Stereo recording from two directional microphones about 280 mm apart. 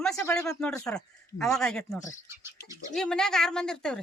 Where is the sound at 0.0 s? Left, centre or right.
Centre.